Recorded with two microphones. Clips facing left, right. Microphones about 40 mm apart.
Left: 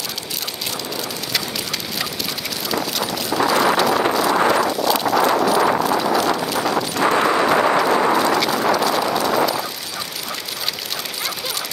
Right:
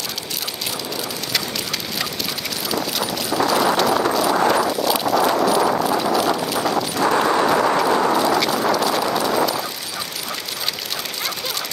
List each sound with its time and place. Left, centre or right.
2.7 s clip-clop: centre
7.1 s a sound: centre
8.2 s clip-clop: centre